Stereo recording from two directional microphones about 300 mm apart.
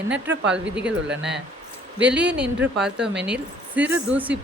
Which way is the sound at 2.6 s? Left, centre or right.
Centre.